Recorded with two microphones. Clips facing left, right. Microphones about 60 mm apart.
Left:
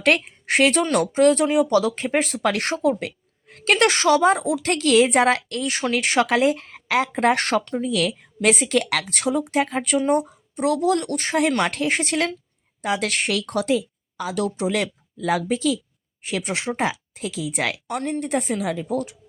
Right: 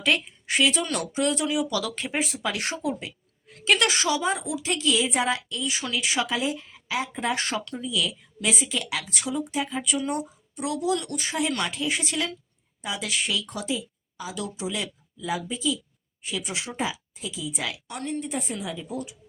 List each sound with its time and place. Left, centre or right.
0.0 s a woman's voice: left
0.9 s speech: left
2.1 s a woman's voice: left
7.6 s speech: left
7.9 s a woman's voice: left
10.0 s a woman's voice: left